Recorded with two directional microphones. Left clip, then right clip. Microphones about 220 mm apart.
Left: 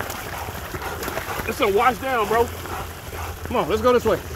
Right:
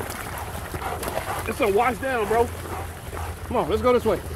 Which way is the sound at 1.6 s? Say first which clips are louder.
Left 3 dB; 25° left (ahead or behind).